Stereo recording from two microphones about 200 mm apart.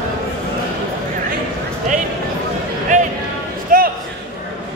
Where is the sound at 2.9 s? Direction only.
35° right (ahead or behind).